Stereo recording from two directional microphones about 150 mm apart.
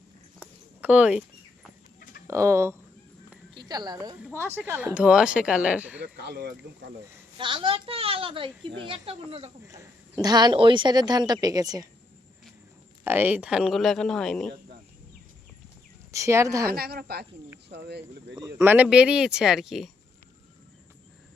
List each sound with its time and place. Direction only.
0.8 s speech: 10° right (ahead or behind)
2.2 s speech: 20° right (ahead or behind)
3.5 s a woman's voice: 25° right (ahead or behind)
4.3 s speech: 15° left (ahead or behind)
4.5 s speech: 15° right (ahead or behind)
6.1 s speech: 90° right
7.3 s speech: 35° right (ahead or behind)
9.6 s speech: 20° right (ahead or behind)
13.1 s speech: 10° right (ahead or behind); by 14.5 s 5° left (ahead or behind)
16.1 s speech: 20° right (ahead or behind)
16.6 s speech: 90° right
18.3 s speech: 25° right (ahead or behind)
18.6 s speech: 10° right (ahead or behind)